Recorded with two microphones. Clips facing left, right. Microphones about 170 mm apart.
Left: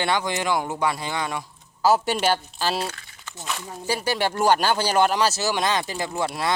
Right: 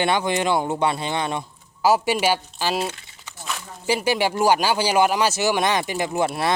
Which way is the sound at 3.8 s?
15° right (ahead or behind).